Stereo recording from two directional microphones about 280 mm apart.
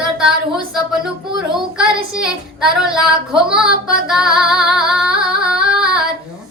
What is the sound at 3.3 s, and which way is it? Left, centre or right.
Female singing, centre.